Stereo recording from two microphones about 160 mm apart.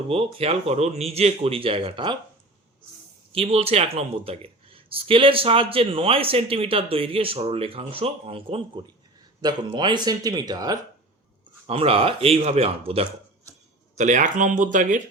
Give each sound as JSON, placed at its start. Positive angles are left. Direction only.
{"t": 0.1, "sound": "speech", "side_deg": -35}
{"t": 3.3, "sound": "speech", "side_deg": -40}
{"t": 11.6, "sound": "speech", "side_deg": -35}
{"t": 13.9, "sound": "speech", "side_deg": -50}